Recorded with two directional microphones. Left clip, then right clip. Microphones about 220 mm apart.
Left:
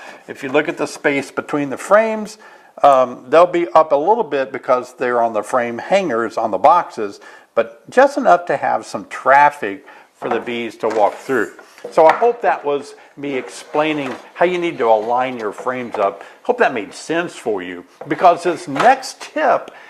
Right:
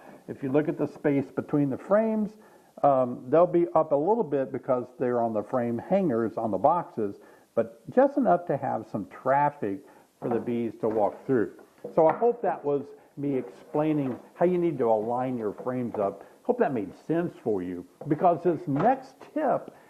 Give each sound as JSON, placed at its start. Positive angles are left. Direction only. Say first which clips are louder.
{"t": 0.0, "sound": "speech", "louder": "left 8 dB", "side_deg": 10}
{"t": 4.0, "sound": "a man's voice", "louder": "left 10 dB", "side_deg": 35}
{"t": 4.3, "sound": "speech", "louder": "left 10 dB", "side_deg": 10}